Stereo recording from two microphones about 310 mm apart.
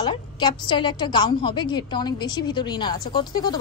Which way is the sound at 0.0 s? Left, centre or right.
Centre.